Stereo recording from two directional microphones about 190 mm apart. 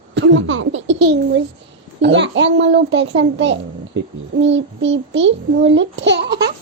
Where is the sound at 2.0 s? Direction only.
70° right (ahead or behind).